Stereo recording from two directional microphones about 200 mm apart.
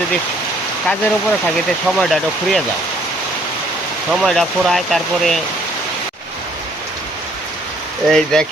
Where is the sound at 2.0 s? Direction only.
Centre (ahead or behind).